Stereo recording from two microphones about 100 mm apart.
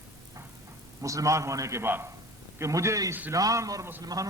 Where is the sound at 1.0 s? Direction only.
35° right (ahead or behind).